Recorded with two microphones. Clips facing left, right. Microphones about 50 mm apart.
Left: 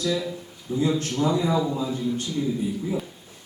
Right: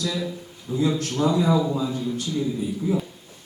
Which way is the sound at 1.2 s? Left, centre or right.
Right.